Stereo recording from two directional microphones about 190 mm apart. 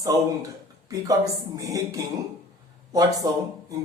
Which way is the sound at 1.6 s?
15° right (ahead or behind).